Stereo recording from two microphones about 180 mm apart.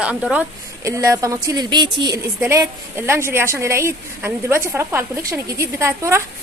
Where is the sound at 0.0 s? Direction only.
5° right (ahead or behind).